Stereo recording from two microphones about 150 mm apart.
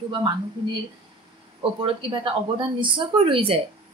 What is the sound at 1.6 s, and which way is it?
A woman's voice, 35° right (ahead or behind).